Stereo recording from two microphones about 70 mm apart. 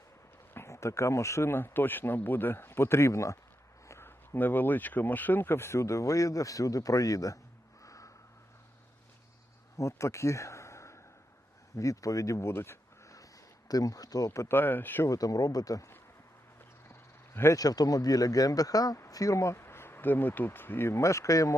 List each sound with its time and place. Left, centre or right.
0.5 s speech: left
3.8 s a sound: left
4.4 s speech: left
7.9 s snort: left
9.7 s a sound: left
11.8 s speech: left
13.7 s speech: left
14.4 s speech: left
15.0 s speech: left
16.9 s a sound: left
17.6 s speech: left